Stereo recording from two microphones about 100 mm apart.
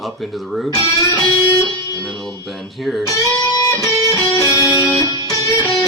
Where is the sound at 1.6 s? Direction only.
45° right (ahead or behind).